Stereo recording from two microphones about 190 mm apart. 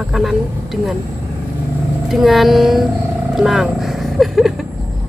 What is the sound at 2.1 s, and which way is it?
Speech, centre (ahead or behind).